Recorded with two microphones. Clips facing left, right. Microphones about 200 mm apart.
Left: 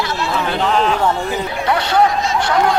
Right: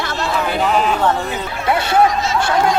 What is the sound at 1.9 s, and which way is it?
Speech, 5° right (ahead or behind).